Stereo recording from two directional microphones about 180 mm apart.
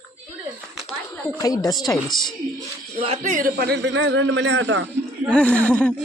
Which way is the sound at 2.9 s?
35° right (ahead or behind).